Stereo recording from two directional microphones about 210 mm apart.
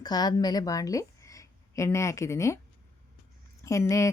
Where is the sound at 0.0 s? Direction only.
20° left (ahead or behind).